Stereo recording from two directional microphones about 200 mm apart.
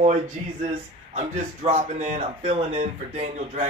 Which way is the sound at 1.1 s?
35° right (ahead or behind).